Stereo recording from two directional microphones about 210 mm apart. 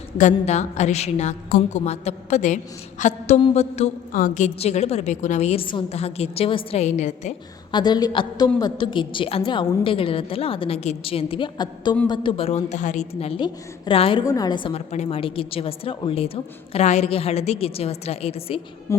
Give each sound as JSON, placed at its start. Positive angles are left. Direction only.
{"t": 0.2, "sound": "a woman's voice", "side_deg": 35}
{"t": 7.7, "sound": "a woman's voice", "side_deg": 20}
{"t": 18.9, "sound": "music", "side_deg": 15}